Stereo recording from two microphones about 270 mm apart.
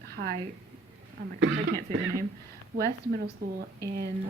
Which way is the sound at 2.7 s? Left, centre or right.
Right.